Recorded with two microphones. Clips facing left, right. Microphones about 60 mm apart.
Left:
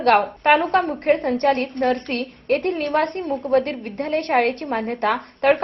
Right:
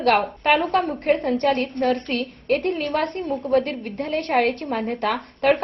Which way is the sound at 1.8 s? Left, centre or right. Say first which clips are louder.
Left 1 dB; left.